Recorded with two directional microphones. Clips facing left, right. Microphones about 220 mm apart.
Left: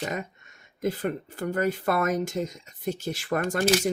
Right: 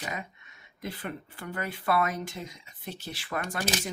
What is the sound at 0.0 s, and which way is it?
Speech, 45° left (ahead or behind).